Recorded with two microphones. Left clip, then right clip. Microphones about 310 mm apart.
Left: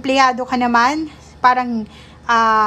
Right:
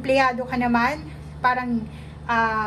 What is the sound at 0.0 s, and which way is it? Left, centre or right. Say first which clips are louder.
A woman's voice: left 5 dB; centre.